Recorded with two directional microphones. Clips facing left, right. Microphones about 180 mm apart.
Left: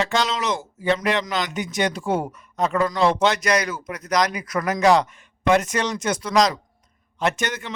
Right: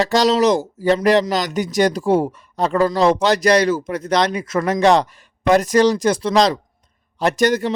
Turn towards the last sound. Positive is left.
turn(degrees=-40)  # may be behind; listen again after turning